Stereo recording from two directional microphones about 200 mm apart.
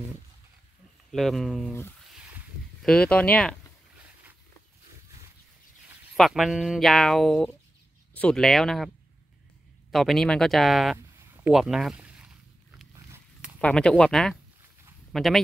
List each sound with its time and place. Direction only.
1.1 s speech: centre (ahead or behind)
2.8 s speech: 5° left (ahead or behind)
6.1 s speech: centre (ahead or behind)
11.1 s a sound: 15° right (ahead or behind)
11.5 s speech: centre (ahead or behind)
13.4 s speech: 5° left (ahead or behind)